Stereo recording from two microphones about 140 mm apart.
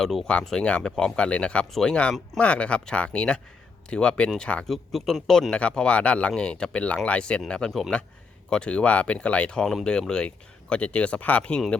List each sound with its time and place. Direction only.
0.0 s speech: centre (ahead or behind)